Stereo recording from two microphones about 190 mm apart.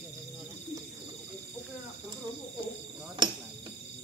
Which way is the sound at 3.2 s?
25° right (ahead or behind).